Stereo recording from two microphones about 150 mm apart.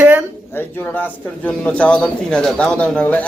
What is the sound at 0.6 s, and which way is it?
Speech, 15° left (ahead or behind).